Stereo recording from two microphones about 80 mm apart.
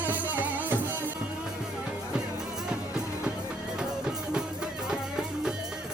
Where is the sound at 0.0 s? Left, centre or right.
Right.